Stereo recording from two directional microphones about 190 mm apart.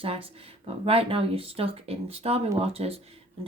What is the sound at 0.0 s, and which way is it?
Speech, 30° right (ahead or behind).